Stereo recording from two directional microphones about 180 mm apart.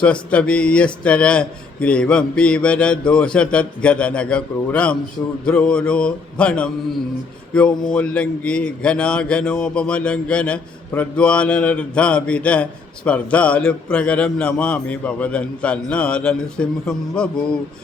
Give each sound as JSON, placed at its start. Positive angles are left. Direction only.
{"t": 0.0, "sound": "a man's voice", "side_deg": 5}